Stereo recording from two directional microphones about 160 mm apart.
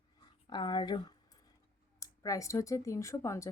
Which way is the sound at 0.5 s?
30° left (ahead or behind).